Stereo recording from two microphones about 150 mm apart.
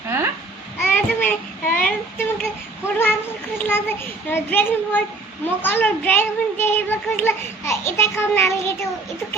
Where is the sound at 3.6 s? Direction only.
15° left (ahead or behind).